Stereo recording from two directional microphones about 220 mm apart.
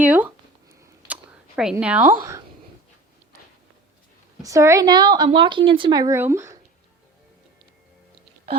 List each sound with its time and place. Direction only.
0.0 s speech: 5° right (ahead or behind)
0.7 s a sound: 10° right (ahead or behind)
1.7 s a woman's voice: 5° right (ahead or behind)
4.4 s a woman's voice: 15° right (ahead or behind)